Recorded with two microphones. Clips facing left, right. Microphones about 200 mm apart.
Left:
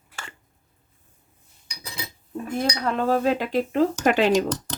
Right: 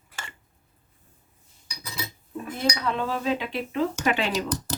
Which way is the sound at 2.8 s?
45° left (ahead or behind).